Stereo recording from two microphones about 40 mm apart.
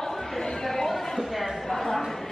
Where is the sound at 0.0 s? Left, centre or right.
Centre.